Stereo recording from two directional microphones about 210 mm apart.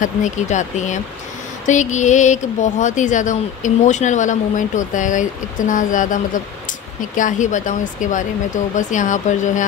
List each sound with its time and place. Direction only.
0.0 s speech: 35° left (ahead or behind)